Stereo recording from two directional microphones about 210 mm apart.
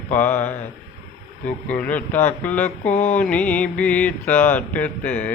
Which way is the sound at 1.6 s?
5° left (ahead or behind).